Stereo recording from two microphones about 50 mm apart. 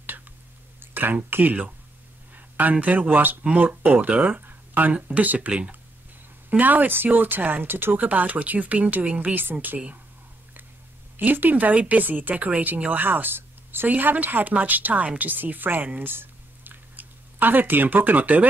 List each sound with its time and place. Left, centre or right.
0.7 s speech: right
4.2 s a sound: right
4.9 s speech: right
6.5 s speech: right
8.0 s speech: right
11.1 s speech: right